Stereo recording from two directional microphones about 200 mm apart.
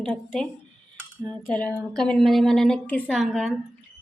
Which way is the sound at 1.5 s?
5° left (ahead or behind).